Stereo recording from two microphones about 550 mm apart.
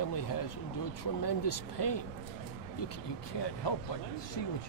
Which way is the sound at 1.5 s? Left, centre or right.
Left.